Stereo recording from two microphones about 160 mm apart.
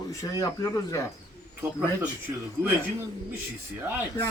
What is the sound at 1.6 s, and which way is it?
Speech, 10° right (ahead or behind).